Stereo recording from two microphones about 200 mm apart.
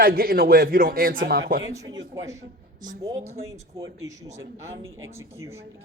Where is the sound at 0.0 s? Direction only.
50° right (ahead or behind).